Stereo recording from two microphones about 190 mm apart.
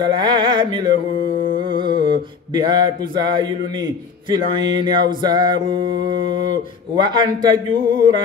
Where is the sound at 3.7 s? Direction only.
20° right (ahead or behind).